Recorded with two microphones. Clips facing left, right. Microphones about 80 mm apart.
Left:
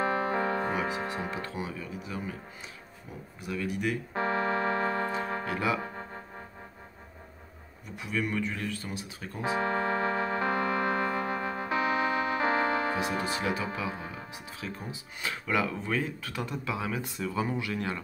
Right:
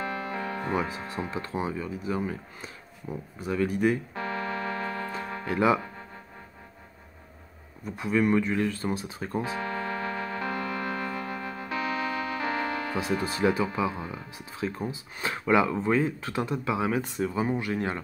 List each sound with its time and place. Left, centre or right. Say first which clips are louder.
0.0 s music: left 4 dB; left
1.1 s speech: right 1 dB; left
1.7 s speech: right 7 dB; right
3.3 s speech: right 6 dB; right
4.1 s keyboard: left 3 dB; left
5.5 s speech: right 8 dB; right
5.8 s music: left 3 dB; left
7.9 s speech: right 8 dB; right
9.4 s music: left 5 dB; left
13.4 s speech: right 6 dB; right